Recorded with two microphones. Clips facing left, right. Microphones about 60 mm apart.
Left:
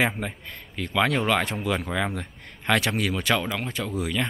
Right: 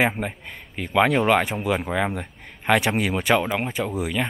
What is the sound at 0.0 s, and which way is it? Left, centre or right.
Speech, centre.